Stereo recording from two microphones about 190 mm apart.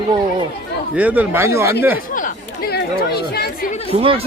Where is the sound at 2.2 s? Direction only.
50° left (ahead or behind).